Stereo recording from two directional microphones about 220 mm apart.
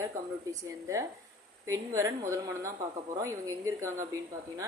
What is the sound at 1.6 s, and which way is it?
A woman's voice, 15° right (ahead or behind).